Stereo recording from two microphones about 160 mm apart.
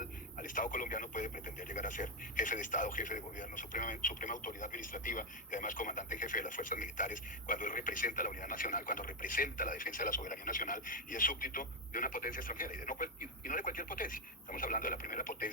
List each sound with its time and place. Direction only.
0.0 s speech: 55° left (ahead or behind)